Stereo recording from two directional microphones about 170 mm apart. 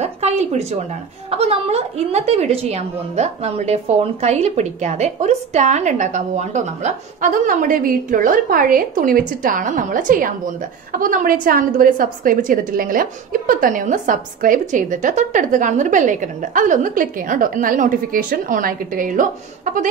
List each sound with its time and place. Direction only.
0.0 s a woman's voice: 40° right (ahead or behind)